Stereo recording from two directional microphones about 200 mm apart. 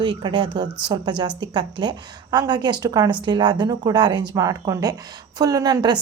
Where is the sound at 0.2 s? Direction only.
25° right (ahead or behind).